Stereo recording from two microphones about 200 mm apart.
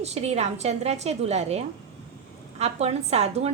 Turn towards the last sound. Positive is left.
turn(degrees=-30)  # may be behind; listen again after turning